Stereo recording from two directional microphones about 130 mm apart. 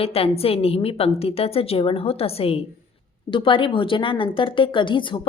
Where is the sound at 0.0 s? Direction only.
50° left (ahead or behind).